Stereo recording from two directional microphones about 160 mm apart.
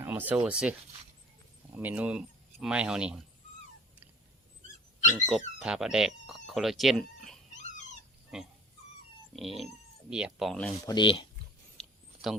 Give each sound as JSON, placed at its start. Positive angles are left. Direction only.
{"t": 0.0, "sound": "speech", "side_deg": -10}
{"t": 5.5, "sound": "speech", "side_deg": -5}
{"t": 9.3, "sound": "speech", "side_deg": 0}
{"t": 10.8, "sound": "speech", "side_deg": 30}
{"t": 11.8, "sound": "a sound", "side_deg": 0}